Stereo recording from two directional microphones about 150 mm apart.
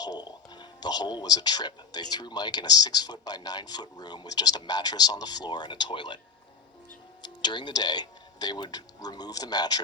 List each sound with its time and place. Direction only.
0.0 s speech: 30° left (ahead or behind)
7.4 s speech: 30° left (ahead or behind)